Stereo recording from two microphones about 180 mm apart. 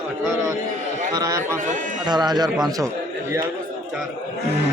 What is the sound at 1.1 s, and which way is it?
A man's voice, 20° right (ahead or behind).